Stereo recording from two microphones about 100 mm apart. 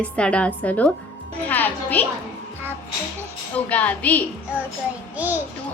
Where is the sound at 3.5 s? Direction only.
15° left (ahead or behind).